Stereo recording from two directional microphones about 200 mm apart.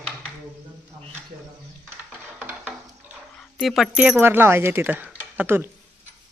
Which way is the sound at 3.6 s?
Centre (ahead or behind).